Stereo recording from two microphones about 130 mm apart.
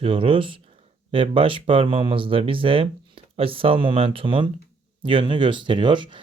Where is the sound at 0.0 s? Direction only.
45° right (ahead or behind).